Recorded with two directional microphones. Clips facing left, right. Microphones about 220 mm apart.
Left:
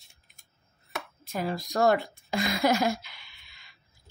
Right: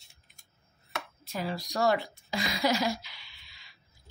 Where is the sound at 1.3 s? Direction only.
50° left (ahead or behind).